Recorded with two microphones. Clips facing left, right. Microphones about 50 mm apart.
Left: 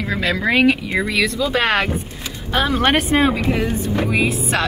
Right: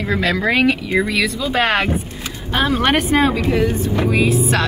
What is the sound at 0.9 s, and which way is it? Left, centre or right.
Speech, centre.